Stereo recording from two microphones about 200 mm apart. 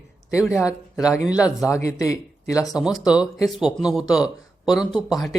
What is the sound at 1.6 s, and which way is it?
Speech, 15° left (ahead or behind).